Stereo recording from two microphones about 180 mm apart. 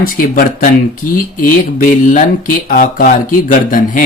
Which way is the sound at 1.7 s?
45° left (ahead or behind).